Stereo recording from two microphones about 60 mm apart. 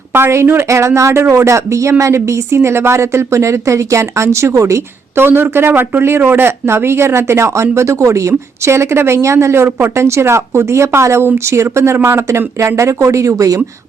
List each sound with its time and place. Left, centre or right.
0.1 s a woman's voice: right
5.1 s speech: right